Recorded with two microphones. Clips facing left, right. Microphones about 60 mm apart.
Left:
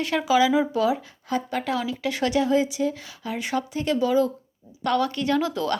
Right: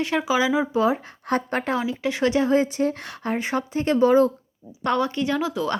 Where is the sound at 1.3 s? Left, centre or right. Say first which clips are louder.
Right 3 dB; right.